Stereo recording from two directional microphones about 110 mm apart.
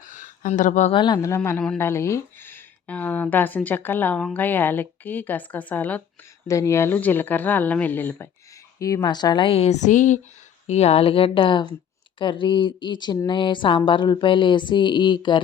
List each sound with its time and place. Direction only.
0.4 s speech: 90° left
0.9 s speech: 45° left (ahead or behind)
1.2 s speech: 25° left (ahead or behind)
1.5 s speech: 5° left (ahead or behind)
1.8 s speech: 25° left (ahead or behind)
6.5 s speech: 25° left (ahead or behind)
8.8 s a woman's voice: 35° left (ahead or behind)
9.5 s speech: 75° left (ahead or behind)
10.7 s speech: 75° left (ahead or behind); by 15.4 s 45° left (ahead or behind)